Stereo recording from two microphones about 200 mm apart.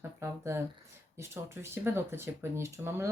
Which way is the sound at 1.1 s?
15° right (ahead or behind).